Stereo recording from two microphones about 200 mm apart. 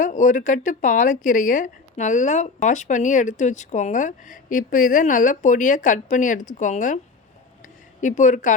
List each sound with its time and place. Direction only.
0.0 s speech: 40° left (ahead or behind)
8.0 s speech: 40° left (ahead or behind)